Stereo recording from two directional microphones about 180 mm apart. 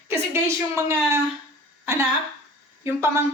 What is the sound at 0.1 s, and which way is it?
A woman's voice, 15° right (ahead or behind).